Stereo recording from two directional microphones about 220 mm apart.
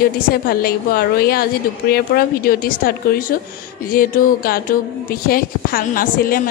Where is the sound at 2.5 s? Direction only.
40° left (ahead or behind).